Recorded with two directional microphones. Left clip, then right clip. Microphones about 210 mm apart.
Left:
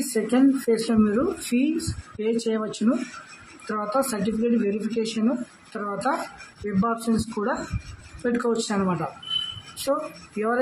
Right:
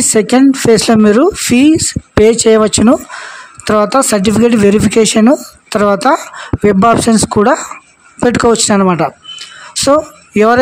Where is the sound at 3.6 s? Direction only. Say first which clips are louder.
Right 15 dB; 55° right (ahead or behind).